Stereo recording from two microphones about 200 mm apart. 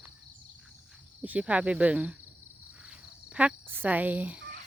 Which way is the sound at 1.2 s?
5° right (ahead or behind).